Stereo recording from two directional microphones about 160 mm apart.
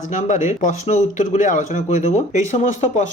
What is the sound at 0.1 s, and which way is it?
Speech, 50° left (ahead or behind).